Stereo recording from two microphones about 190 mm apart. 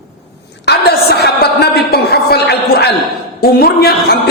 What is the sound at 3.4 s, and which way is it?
Speech, 55° left (ahead or behind).